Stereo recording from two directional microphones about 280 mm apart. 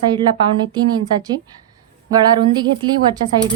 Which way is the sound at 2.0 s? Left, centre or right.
Centre.